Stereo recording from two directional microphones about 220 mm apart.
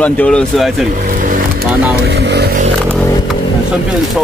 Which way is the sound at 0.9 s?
35° right (ahead or behind).